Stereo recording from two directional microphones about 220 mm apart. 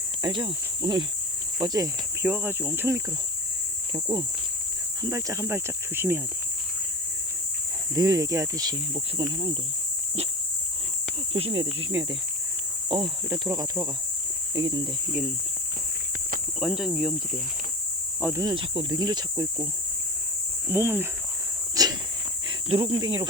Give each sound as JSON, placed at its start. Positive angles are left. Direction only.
{"t": 0.2, "sound": "cricket", "side_deg": -20}
{"t": 1.5, "sound": "speech", "side_deg": -15}
{"t": 7.9, "sound": "speech", "side_deg": -15}
{"t": 9.1, "sound": "cricket", "side_deg": -20}
{"t": 11.3, "sound": "cricket", "side_deg": -25}
{"t": 12.9, "sound": "speech", "side_deg": -20}
{"t": 16.6, "sound": "speech", "side_deg": 0}
{"t": 20.7, "sound": "speech", "side_deg": -10}